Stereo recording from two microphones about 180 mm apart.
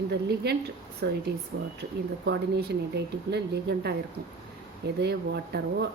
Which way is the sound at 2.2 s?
70° right (ahead or behind).